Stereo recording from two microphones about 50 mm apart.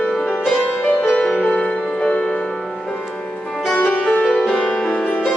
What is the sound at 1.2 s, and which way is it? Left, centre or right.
Music, centre.